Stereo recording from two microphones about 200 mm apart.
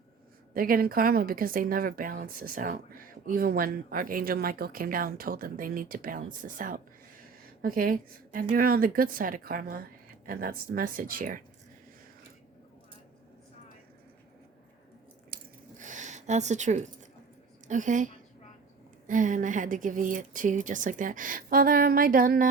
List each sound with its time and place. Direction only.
0.5 s a woman's voice: 45° right (ahead or behind)
15.8 s a sound: 40° right (ahead or behind)
17.7 s a woman's voice: 40° right (ahead or behind)